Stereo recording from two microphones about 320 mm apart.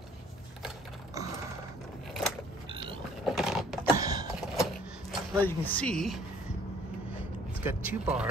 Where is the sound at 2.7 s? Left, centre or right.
Centre.